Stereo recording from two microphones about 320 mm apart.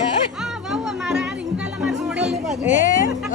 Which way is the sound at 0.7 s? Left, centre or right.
Centre.